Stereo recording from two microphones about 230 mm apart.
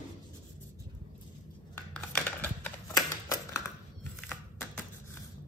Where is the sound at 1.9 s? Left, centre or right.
Centre.